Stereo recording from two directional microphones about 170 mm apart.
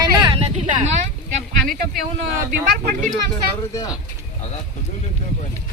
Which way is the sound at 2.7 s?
55° right (ahead or behind).